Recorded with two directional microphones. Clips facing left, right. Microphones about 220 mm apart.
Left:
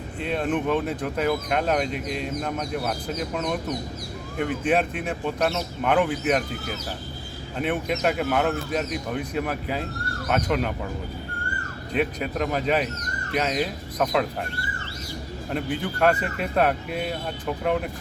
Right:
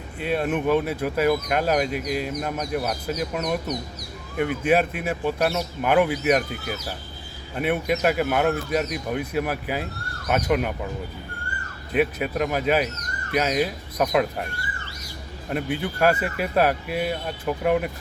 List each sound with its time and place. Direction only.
0.2 s speech: 5° right (ahead or behind)
3.4 s speech: 15° right (ahead or behind)
11.9 s speech: 5° right (ahead or behind)